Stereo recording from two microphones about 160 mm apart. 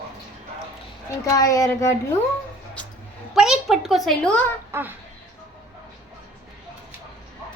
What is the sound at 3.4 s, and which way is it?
A woman's voice, centre (ahead or behind).